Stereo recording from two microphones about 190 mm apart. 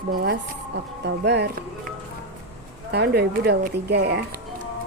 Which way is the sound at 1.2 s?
65° right (ahead or behind).